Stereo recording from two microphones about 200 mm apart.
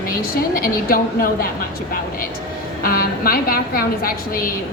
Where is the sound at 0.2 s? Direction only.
45° left (ahead or behind).